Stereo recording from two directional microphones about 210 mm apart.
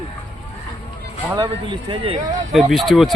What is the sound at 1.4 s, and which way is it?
Speech, 25° right (ahead or behind).